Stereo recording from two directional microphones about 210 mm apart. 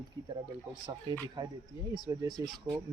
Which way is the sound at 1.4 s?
20° right (ahead or behind).